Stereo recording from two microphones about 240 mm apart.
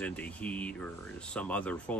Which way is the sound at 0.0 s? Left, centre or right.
Centre.